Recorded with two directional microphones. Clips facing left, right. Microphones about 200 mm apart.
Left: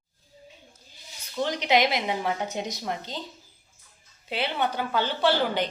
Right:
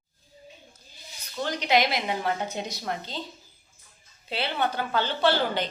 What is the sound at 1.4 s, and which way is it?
A woman's voice, 20° left (ahead or behind).